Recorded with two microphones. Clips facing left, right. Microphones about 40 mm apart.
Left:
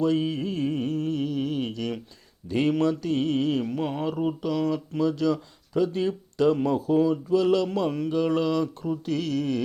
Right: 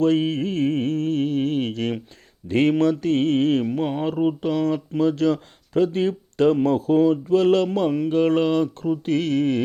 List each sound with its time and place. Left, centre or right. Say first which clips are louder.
0.0 s music: right 5 dB; right
2.5 s speech: right 5 dB; right
3.8 s speech: right 5 dB; right
7.9 s mantra: right 5 dB; right
8.1 s speech: right 5 dB; right